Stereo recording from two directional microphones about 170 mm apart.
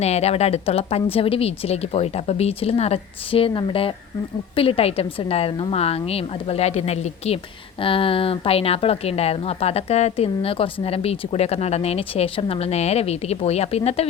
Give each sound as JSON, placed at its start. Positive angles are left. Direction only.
{"t": 0.0, "sound": "speech", "side_deg": 40}